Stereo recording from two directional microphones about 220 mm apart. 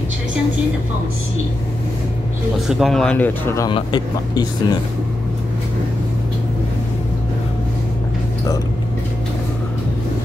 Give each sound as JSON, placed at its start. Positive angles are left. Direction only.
{"t": 2.7, "sound": "speech", "side_deg": 0}